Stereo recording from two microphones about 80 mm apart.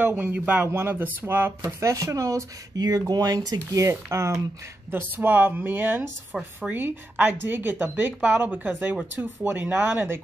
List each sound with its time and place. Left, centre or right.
0.0 s speech: right
1.6 s speech: right
3.8 s speech: right
4.9 s speech: right
6.3 s speech: centre
6.7 s speech: right